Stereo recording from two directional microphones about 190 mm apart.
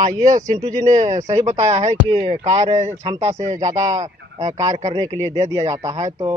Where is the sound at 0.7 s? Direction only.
40° right (ahead or behind).